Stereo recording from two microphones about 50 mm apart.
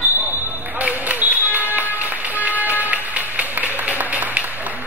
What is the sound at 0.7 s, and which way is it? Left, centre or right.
Music, right.